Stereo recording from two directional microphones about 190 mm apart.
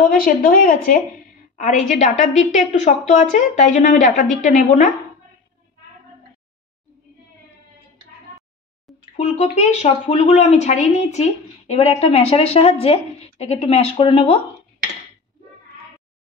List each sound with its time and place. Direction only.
0.1 s a woman's voice: 50° left (ahead or behind)
9.1 s a woman's voice: 35° left (ahead or behind)